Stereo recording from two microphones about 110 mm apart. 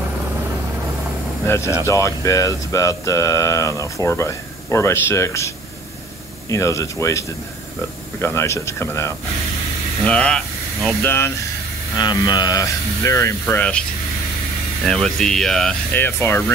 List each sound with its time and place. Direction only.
1.4 s speech: 25° left (ahead or behind)
6.5 s speech: 25° left (ahead or behind)
10.0 s speech: 10° left (ahead or behind)
11.0 s speech: 20° left (ahead or behind)
12.0 s speech: 35° left (ahead or behind)
13.6 s speech: 10° left (ahead or behind)
14.9 s speech: 5° left (ahead or behind)
15.9 s speech: 20° left (ahead or behind)